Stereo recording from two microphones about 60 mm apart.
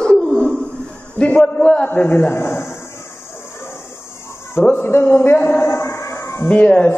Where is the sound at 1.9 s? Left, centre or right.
Left.